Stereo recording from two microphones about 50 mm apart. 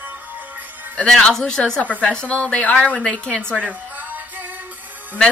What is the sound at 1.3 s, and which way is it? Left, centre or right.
A woman's voice, centre.